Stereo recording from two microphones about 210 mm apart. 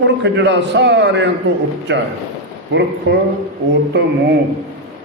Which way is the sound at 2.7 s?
60° right (ahead or behind).